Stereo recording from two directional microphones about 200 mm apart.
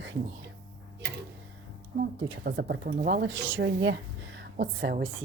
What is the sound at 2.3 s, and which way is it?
Speech, 50° right (ahead or behind).